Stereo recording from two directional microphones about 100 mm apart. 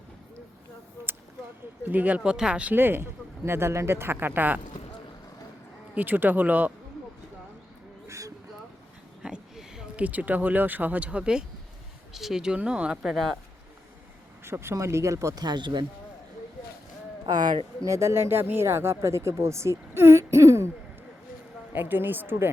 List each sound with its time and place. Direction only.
1.0 s a sound: 25° right (ahead or behind)
1.8 s speech: 15° right (ahead or behind)
5.9 s speech: 20° right (ahead or behind)
8.0 s a sound: 30° right (ahead or behind)
9.2 s speech: 5° right (ahead or behind)
14.4 s speech: 25° right (ahead or behind)
15.4 s speech: 45° right (ahead or behind)
17.2 s speech: 45° right (ahead or behind)
17.8 s speech: 30° right (ahead or behind)
19.9 s throat clearing: 25° right (ahead or behind)
21.7 s speech: 20° right (ahead or behind)